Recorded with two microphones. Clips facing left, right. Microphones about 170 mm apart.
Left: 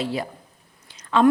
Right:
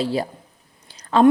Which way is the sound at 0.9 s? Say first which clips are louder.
Right 2 dB; 35° right (ahead or behind).